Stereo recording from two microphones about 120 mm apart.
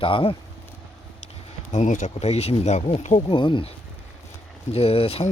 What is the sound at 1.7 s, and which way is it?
Speech, 80° left.